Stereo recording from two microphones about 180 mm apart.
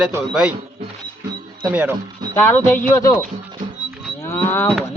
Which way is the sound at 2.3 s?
10° left (ahead or behind).